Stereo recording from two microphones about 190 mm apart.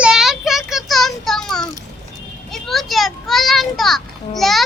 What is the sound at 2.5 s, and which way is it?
A child's voice, centre (ahead or behind).